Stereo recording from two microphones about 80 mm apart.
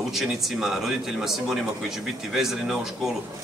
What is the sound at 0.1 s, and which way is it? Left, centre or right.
Speech, centre.